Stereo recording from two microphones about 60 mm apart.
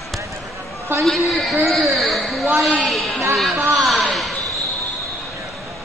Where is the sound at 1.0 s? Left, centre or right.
Centre.